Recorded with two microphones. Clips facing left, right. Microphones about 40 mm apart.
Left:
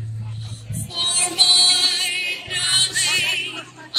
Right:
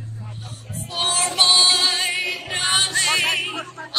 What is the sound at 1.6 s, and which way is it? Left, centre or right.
Music, left.